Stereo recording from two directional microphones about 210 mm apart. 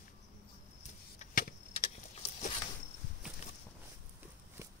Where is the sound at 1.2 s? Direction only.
40° left (ahead or behind).